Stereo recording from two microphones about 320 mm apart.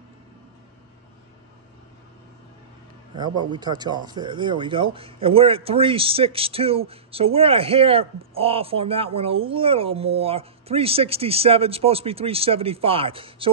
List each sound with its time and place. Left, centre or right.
3.2 s speech: centre